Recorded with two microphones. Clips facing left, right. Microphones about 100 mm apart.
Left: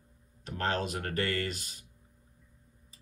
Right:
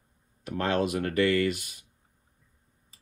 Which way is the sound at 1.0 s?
40° left (ahead or behind).